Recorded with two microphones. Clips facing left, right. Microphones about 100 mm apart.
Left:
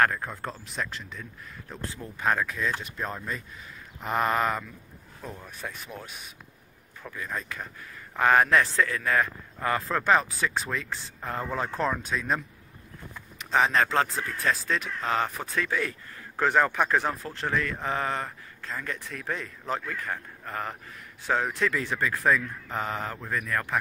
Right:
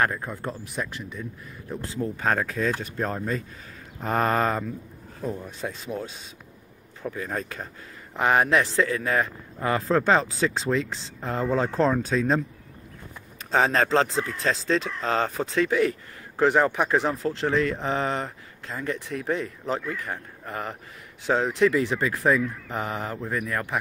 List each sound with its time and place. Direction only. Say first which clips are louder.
0.0 s speech: even; 10° right (ahead or behind)
2.0 s a man's voice: right 2 dB; 35° right (ahead or behind)
7.0 s speech: right 5 dB; 40° right (ahead or behind)
8.2 s a man's voice: even; 20° right (ahead or behind); by 12.4 s 40° right (ahead or behind)
13.5 s a man's voice: right 2 dB; 35° right (ahead or behind); by 23.8 s 20° right (ahead or behind)